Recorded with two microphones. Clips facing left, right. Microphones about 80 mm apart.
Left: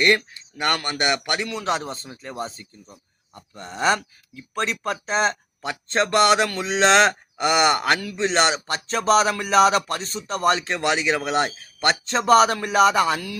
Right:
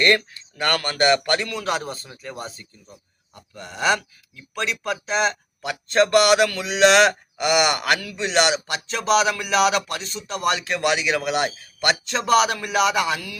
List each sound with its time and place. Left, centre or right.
0.0 s a man's voice: centre; by 13.4 s left